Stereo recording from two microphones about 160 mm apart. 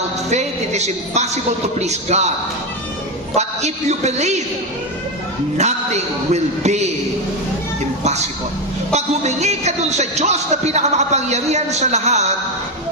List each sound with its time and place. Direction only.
0.3 s a man's voice: 45° right (ahead or behind)
3.3 s a man's voice: 45° right (ahead or behind)
5.6 s a man's voice: 45° right (ahead or behind)
8.0 s a sound: 45° right (ahead or behind)
8.9 s a man's voice: 45° right (ahead or behind)